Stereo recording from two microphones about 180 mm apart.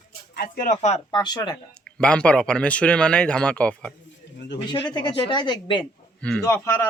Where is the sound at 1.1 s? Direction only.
25° left (ahead or behind).